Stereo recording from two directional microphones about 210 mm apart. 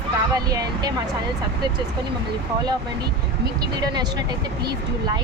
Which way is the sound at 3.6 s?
20° right (ahead or behind).